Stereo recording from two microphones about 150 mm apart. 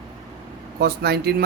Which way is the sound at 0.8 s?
90° right.